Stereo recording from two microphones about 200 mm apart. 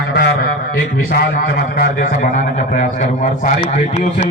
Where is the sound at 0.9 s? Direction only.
50° left (ahead or behind).